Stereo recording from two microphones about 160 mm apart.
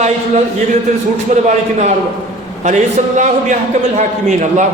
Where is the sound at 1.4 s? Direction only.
45° right (ahead or behind).